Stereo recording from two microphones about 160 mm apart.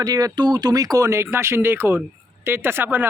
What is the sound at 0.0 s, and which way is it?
Speech, 20° right (ahead or behind).